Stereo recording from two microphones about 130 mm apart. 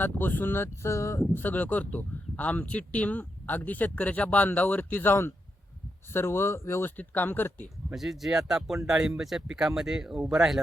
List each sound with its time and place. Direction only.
0.0 s speech: 15° left (ahead or behind)
7.9 s speech: centre (ahead or behind)